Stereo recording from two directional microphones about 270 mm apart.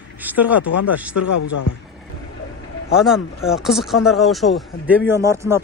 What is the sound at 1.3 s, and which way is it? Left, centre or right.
Speech, left.